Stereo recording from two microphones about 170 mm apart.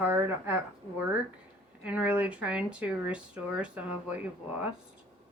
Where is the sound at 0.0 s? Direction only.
10° right (ahead or behind).